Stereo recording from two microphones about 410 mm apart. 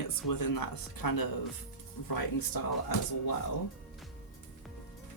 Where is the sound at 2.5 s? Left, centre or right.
Left.